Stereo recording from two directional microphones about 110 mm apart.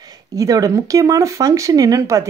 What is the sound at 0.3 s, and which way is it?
Speech, 30° right (ahead or behind).